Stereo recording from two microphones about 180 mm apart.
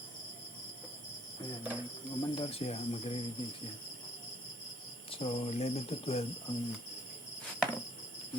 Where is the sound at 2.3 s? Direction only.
30° left (ahead or behind).